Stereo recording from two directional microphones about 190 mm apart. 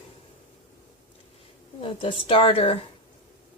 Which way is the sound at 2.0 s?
25° left (ahead or behind).